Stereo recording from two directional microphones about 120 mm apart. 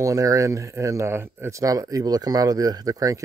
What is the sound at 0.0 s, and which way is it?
Speech, 25° right (ahead or behind).